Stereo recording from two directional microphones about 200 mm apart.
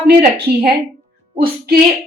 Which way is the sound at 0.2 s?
55° right (ahead or behind).